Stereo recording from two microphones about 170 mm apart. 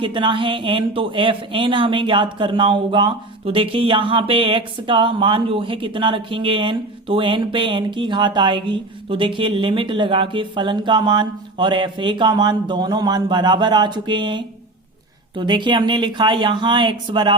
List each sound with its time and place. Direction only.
0.0 s speech: 30° right (ahead or behind)